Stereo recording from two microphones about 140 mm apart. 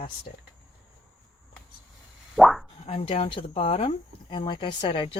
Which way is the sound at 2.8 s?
40° left (ahead or behind).